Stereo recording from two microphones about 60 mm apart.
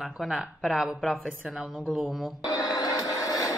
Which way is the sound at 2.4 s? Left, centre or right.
Left.